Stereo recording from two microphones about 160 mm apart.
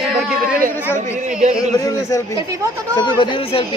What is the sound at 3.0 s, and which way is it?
Speech, 30° left (ahead or behind).